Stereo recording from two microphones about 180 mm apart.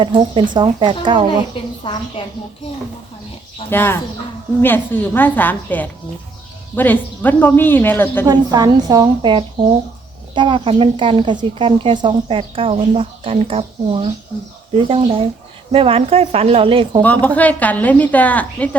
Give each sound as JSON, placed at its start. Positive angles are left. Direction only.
{"t": 0.0, "sound": "speech", "side_deg": -25}
{"t": 1.8, "sound": "a woman's voice", "side_deg": 25}
{"t": 3.7, "sound": "a woman's voice", "side_deg": 10}
{"t": 8.3, "sound": "speech", "side_deg": -20}
{"t": 17.0, "sound": "a woman's voice", "side_deg": 10}